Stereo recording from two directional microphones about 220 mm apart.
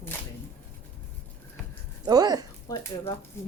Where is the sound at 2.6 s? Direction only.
15° left (ahead or behind).